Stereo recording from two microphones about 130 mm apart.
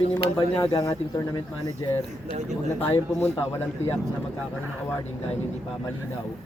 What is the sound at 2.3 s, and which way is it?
Speech, 65° right (ahead or behind).